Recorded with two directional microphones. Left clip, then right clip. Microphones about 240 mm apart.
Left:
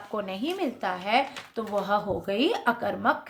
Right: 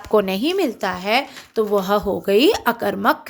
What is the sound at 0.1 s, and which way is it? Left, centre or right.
Speech, right.